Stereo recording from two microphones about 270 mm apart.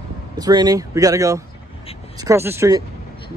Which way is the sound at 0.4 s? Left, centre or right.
Centre.